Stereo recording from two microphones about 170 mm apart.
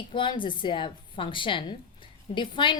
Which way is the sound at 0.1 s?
30° left (ahead or behind).